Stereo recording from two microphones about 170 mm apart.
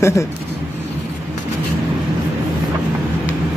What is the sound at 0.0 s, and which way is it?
Speech, 15° left (ahead or behind).